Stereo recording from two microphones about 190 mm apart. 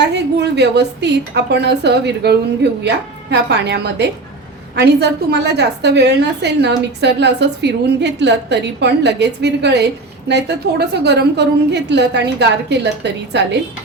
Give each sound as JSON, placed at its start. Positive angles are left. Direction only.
{"t": 0.0, "sound": "a woman's voice", "side_deg": -65}